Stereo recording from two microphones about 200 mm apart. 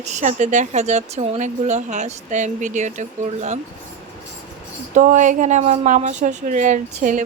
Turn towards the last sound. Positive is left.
turn(degrees=-40)  # may be behind; listen again after turning